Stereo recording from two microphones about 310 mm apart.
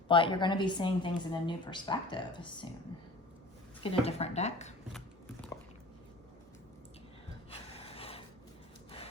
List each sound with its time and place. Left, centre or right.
0.1 s a woman's voice: centre
3.8 s speech: centre
4.9 s a sound: centre
7.5 s gasp: centre